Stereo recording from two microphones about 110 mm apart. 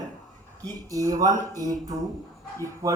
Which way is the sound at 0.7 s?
35° right (ahead or behind).